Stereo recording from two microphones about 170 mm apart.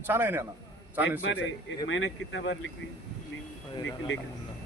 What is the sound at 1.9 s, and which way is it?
Speech, 90° left.